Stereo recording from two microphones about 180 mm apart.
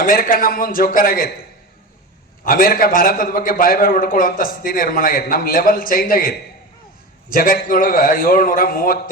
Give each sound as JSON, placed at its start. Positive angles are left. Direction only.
{"t": 0.0, "sound": "a man's voice", "side_deg": 55}
{"t": 2.4, "sound": "a man's voice", "side_deg": 55}